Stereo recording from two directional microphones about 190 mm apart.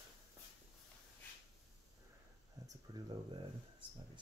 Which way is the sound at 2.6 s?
20° right (ahead or behind).